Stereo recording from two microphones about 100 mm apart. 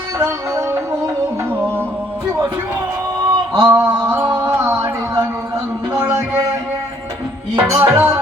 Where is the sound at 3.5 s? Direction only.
45° right (ahead or behind).